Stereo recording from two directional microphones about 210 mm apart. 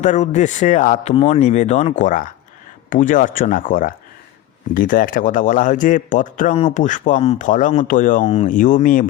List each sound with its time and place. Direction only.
0.0 s speech: 35° left (ahead or behind)